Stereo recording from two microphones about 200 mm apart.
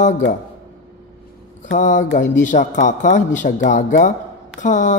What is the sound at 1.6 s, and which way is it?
Speech, 40° left (ahead or behind).